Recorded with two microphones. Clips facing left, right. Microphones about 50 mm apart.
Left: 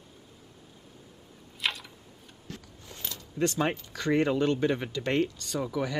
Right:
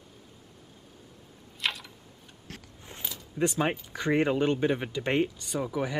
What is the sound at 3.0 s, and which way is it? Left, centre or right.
Speech, centre.